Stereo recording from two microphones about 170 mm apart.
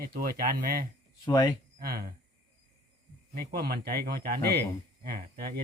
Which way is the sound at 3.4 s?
65° right (ahead or behind).